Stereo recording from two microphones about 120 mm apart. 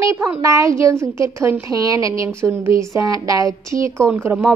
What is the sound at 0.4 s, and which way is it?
A woman's voice, 25° right (ahead or behind).